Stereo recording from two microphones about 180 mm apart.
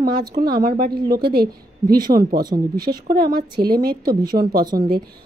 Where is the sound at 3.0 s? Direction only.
55° right (ahead or behind).